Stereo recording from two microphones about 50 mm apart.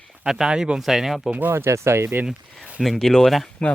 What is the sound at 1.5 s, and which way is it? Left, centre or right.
Speech, right.